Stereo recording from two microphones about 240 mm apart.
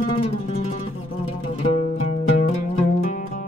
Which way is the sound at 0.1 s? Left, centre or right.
Left.